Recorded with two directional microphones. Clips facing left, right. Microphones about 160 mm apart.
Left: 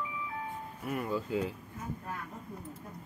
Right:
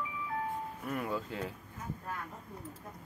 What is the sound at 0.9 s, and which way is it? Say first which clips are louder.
Speech: left 4 dB; 5° left (ahead or behind).